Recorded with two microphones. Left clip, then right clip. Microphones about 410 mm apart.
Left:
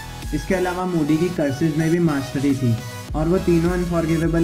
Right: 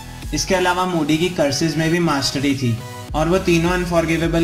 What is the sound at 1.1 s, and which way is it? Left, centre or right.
Speech, right.